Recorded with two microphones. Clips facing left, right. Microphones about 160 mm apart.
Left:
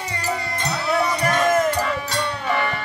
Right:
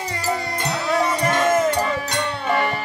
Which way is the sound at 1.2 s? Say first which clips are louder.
Even; 25° right (ahead or behind).